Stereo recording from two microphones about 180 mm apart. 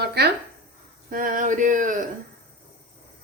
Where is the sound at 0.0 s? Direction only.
65° right (ahead or behind).